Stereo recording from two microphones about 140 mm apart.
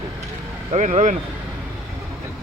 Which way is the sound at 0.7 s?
55° right (ahead or behind).